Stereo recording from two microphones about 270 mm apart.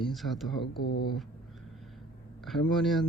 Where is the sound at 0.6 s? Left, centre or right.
Left.